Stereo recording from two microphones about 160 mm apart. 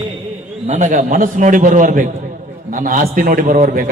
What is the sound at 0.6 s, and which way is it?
A man's voice, 50° right (ahead or behind).